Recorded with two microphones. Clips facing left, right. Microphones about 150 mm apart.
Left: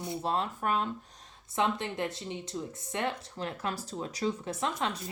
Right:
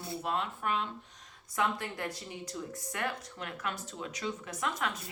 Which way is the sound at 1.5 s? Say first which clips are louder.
Left 3 dB; 25° left (ahead or behind).